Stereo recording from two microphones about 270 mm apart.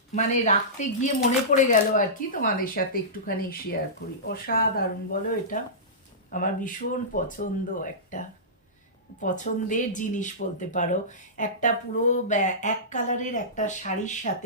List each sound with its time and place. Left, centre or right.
0.2 s speech: left